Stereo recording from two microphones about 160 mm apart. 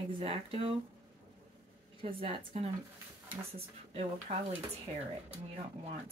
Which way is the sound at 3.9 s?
40° right (ahead or behind).